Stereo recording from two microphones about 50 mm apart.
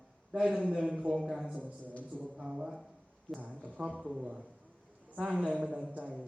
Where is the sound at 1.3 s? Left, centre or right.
Centre.